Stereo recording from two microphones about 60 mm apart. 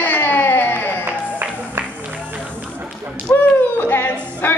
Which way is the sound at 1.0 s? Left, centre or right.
Right.